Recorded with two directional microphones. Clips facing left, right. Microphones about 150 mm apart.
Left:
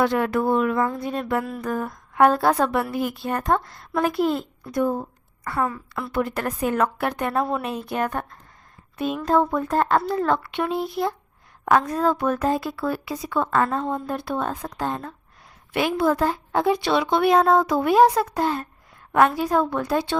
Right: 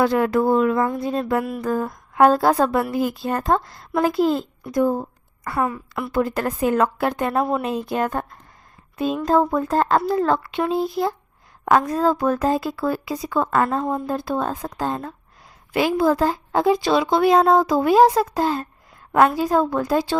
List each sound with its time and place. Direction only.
0.0 s speech: 35° right (ahead or behind)
1.4 s a sound: 15° right (ahead or behind)
1.6 s speech: 30° right (ahead or behind)
5.5 s a woman's voice: 20° right (ahead or behind)
6.2 s a woman's voice: 30° right (ahead or behind)